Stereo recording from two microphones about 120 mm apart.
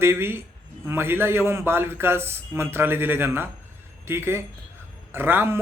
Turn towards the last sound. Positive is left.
turn(degrees=-20)  # may be behind; listen again after turning